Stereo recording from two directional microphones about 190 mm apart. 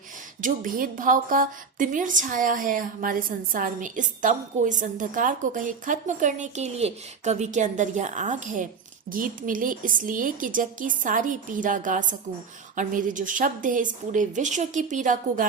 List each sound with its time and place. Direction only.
0.4 s a woman's voice: 45° right (ahead or behind)